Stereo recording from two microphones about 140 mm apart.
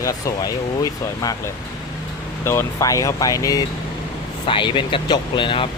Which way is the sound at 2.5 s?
20° left (ahead or behind).